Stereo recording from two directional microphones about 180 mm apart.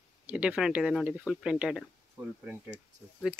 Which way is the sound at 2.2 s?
20° right (ahead or behind).